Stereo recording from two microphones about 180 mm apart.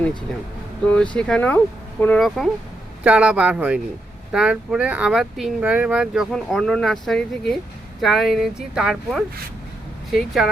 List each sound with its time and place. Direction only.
0.9 s speech: 5° left (ahead or behind)